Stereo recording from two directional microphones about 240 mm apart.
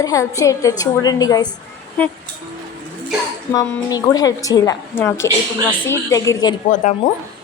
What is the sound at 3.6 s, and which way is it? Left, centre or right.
A woman's voice, centre.